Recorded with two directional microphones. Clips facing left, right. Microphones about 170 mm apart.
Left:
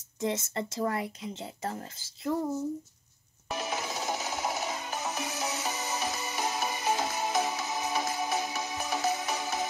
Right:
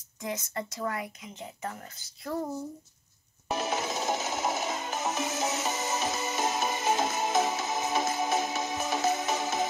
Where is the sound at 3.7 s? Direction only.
20° right (ahead or behind).